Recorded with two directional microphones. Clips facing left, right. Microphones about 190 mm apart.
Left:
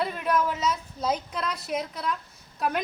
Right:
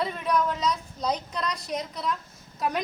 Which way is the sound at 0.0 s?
5° left (ahead or behind).